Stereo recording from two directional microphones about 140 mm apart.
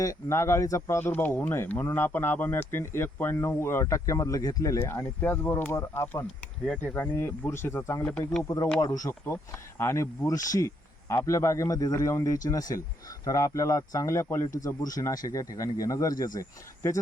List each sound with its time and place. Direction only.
0.0 s speech: 20° left (ahead or behind)